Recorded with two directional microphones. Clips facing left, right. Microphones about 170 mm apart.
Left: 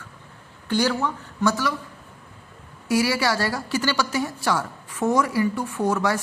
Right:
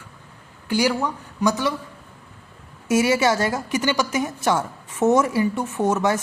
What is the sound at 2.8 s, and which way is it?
A woman's voice, 20° right (ahead or behind).